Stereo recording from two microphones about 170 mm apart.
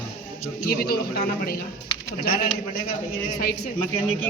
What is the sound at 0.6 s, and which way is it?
Speech, 65° left (ahead or behind).